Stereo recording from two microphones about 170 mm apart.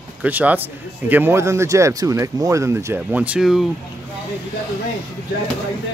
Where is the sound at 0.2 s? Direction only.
10° right (ahead or behind).